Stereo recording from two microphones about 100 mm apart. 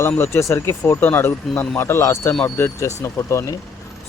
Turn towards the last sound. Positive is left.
turn(degrees=30)  # may be behind; listen again after turning